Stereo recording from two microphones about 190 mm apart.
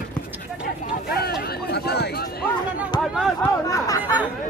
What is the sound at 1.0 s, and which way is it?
Chatter, 55° left (ahead or behind).